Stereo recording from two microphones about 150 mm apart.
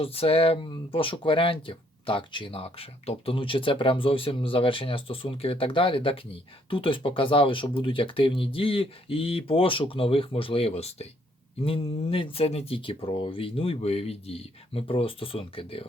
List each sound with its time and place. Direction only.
0.0 s speech: 40° left (ahead or behind)